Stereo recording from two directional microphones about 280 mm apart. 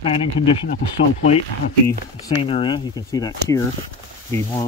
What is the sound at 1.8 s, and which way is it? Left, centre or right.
Speech, left.